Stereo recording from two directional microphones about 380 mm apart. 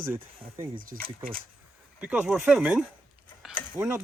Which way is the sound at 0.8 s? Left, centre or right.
Right.